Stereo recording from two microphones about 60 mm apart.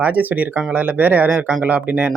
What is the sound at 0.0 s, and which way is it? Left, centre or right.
Speech, right.